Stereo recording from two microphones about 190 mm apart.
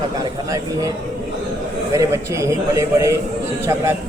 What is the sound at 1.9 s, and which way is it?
A man's voice, 15° right (ahead or behind).